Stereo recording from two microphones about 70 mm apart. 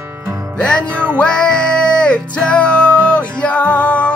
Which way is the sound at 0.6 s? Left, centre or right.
Centre.